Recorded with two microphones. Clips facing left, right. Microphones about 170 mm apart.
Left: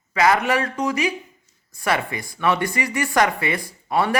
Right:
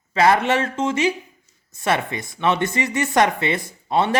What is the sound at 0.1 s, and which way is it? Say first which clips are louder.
Speech: right 2 dB; 30° right (ahead or behind).